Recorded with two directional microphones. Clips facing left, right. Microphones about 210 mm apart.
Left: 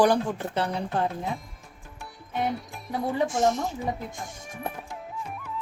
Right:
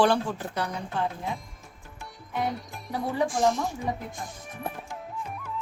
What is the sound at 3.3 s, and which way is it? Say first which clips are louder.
Speech: right 1 dB; 20° left (ahead or behind).